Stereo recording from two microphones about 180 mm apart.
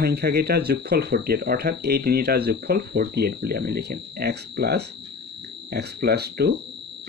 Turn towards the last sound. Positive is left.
turn(degrees=-65)  # may be behind; listen again after turning